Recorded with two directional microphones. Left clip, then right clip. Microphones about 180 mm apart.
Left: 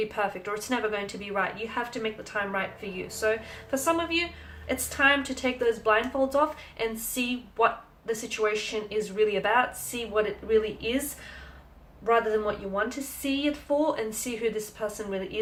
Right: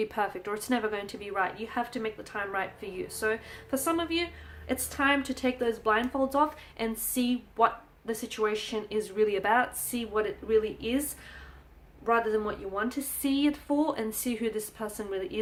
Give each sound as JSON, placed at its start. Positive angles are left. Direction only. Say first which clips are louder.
{"t": 0.1, "sound": "speech", "louder": "left 2 dB", "side_deg": -40}
{"t": 12.0, "sound": "speech", "louder": "left 3 dB", "side_deg": -35}